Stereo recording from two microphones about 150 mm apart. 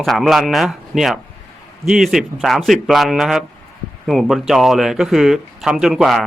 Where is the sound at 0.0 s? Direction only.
Centre (ahead or behind).